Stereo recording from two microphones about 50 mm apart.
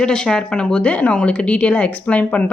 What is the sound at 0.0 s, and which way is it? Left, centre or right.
A woman's voice, centre.